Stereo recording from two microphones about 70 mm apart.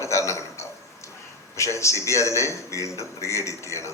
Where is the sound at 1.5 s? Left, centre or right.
Left.